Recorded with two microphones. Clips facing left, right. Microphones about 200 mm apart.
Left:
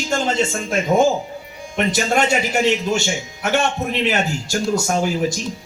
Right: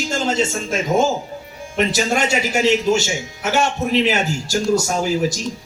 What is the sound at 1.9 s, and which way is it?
A man's voice, 55° left (ahead or behind).